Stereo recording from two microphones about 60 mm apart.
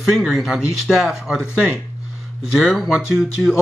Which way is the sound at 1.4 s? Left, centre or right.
Centre.